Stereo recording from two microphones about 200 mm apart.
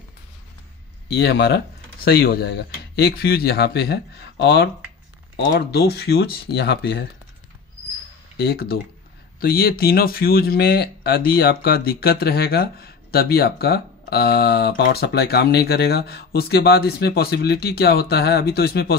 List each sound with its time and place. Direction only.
1.0 s speech: 55° left (ahead or behind)
8.4 s speech: 50° left (ahead or behind)